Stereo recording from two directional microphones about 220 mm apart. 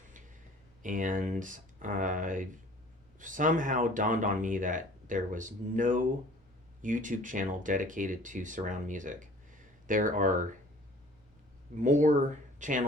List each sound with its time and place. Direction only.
0.8 s speech: 35° right (ahead or behind)
11.8 s speech: 35° right (ahead or behind)